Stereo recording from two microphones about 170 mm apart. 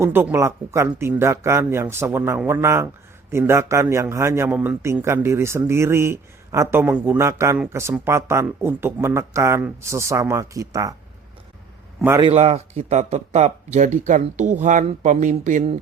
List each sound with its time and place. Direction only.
0.0 s a man's voice: 10° right (ahead or behind)
12.2 s speech: 35° right (ahead or behind)